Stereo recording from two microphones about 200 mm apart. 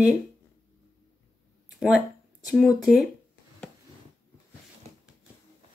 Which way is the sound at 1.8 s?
5° right (ahead or behind).